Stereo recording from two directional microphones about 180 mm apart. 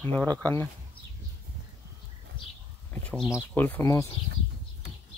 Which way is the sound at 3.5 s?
10° left (ahead or behind).